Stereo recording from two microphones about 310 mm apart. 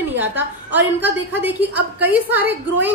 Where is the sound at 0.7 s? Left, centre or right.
Centre.